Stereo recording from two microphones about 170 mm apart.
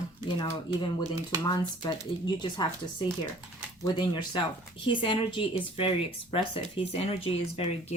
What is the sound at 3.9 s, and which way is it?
Speech, 25° left (ahead or behind).